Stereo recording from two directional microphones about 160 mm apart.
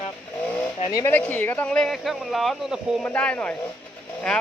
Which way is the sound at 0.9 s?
20° left (ahead or behind).